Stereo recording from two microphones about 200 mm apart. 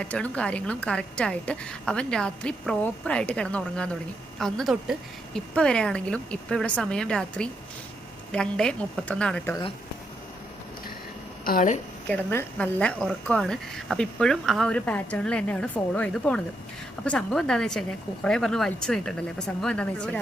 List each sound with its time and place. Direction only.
0.0 s a woman's voice: 5° left (ahead or behind)
11.4 s a woman's voice: 40° left (ahead or behind)
12.0 s a woman's voice: 10° left (ahead or behind)